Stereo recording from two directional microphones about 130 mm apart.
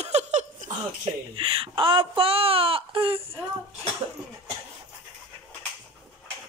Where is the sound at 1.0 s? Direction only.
45° right (ahead or behind).